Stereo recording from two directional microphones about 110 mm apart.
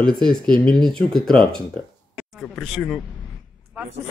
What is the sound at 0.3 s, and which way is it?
Speech, 5° left (ahead or behind).